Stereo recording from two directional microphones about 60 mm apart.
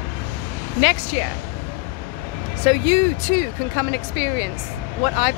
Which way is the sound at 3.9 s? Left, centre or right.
Left.